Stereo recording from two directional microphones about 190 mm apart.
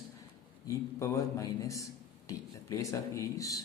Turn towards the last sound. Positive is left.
turn(degrees=15)  # may be behind; listen again after turning